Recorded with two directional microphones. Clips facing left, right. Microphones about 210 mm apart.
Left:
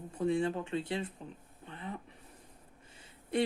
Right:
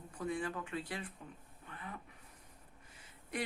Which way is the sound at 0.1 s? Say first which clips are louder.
Left 8 dB; 25° left (ahead or behind).